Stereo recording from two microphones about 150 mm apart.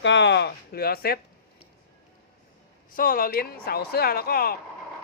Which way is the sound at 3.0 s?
75° left (ahead or behind).